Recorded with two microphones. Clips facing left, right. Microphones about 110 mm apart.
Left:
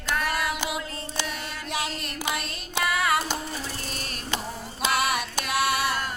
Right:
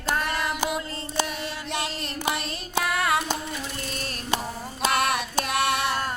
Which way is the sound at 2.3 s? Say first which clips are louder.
Right 2 dB; centre (ahead or behind).